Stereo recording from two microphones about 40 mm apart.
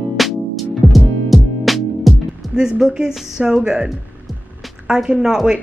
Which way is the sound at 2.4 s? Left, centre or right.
Centre.